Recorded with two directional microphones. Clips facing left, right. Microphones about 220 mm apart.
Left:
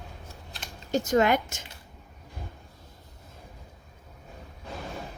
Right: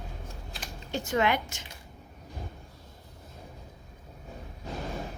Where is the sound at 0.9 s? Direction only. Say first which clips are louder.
Left 5 dB; 40° left (ahead or behind).